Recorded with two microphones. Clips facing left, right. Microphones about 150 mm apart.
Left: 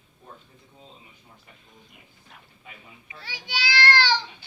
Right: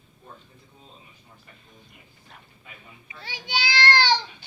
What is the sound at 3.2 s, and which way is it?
Child singing, 20° right (ahead or behind).